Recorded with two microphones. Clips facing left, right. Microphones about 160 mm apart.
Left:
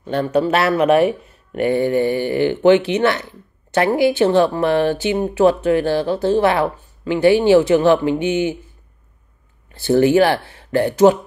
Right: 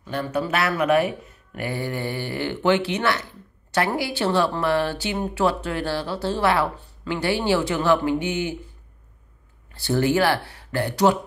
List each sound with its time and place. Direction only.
0.0 s speech: 30° left (ahead or behind)
9.9 s speech: 20° left (ahead or behind)